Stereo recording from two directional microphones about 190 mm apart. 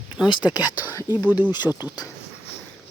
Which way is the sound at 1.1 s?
10° right (ahead or behind).